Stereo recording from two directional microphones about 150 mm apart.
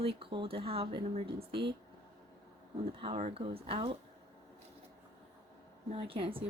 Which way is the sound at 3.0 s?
45° right (ahead or behind).